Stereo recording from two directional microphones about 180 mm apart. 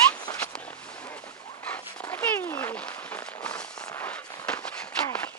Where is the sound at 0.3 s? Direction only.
5° left (ahead or behind).